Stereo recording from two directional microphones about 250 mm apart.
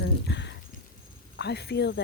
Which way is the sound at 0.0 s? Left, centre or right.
Left.